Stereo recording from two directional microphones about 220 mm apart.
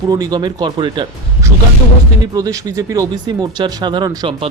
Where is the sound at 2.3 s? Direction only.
15° right (ahead or behind).